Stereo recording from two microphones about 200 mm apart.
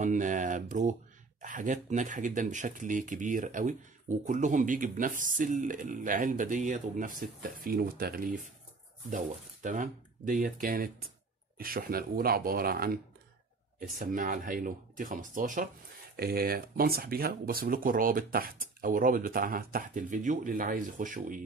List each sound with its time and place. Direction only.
0.0 s speech: 40° right (ahead or behind)